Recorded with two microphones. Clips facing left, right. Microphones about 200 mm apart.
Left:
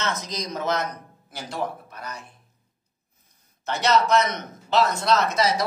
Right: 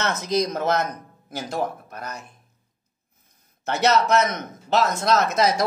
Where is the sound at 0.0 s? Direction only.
55° right (ahead or behind).